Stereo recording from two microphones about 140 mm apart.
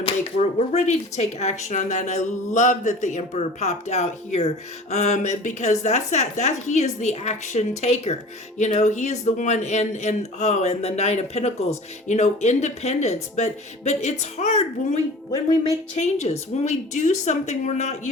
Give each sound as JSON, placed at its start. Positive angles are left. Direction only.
{"t": 0.0, "sound": "a woman's voice", "side_deg": 50}
{"t": 16.0, "sound": "speech", "side_deg": 55}